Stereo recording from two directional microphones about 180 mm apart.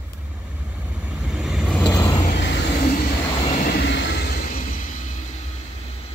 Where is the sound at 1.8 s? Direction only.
25° left (ahead or behind).